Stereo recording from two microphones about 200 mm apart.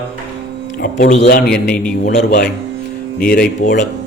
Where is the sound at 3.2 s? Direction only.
45° left (ahead or behind).